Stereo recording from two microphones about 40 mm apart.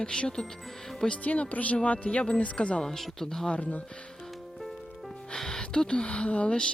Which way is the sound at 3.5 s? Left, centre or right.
Left.